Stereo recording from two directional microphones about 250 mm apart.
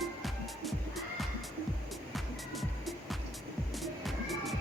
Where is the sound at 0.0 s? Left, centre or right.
Centre.